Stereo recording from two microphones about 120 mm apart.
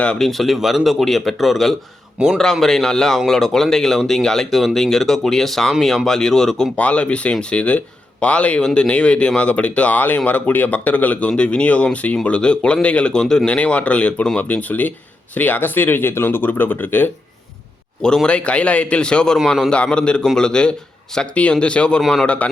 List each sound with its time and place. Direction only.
0.0 s speech: 5° left (ahead or behind)
2.4 s speech: 5° left (ahead or behind)